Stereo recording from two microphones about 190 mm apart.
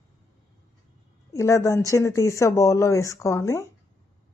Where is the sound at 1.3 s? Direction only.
15° left (ahead or behind).